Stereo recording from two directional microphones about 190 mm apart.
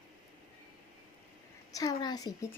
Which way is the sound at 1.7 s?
20° left (ahead or behind).